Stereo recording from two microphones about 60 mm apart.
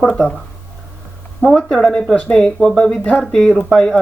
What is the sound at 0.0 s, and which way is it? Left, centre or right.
Speech, centre.